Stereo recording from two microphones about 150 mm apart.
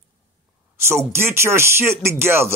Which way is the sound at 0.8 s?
15° right (ahead or behind).